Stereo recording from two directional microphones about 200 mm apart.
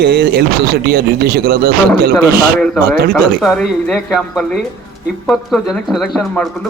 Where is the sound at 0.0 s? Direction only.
50° right (ahead or behind).